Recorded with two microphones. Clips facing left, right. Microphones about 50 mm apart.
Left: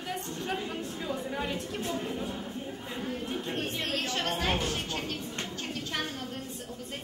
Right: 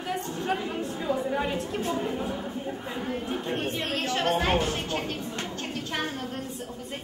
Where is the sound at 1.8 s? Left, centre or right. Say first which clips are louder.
Right 5 dB; centre.